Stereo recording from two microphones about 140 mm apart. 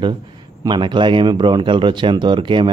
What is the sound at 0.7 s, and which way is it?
Speech, 35° right (ahead or behind).